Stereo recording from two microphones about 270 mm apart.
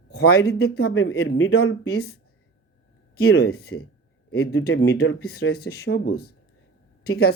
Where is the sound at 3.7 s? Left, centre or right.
Left.